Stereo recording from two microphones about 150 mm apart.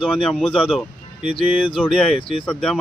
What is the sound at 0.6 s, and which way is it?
Speech, 5° right (ahead or behind).